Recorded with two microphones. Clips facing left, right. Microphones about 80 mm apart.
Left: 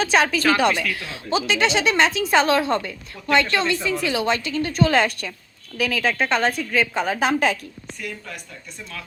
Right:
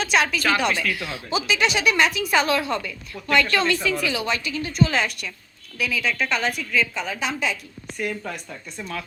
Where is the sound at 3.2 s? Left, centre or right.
Left.